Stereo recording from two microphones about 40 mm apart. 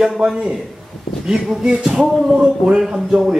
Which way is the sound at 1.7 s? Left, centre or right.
Centre.